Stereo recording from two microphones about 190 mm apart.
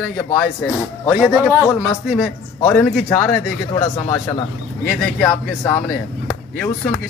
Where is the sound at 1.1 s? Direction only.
5° right (ahead or behind).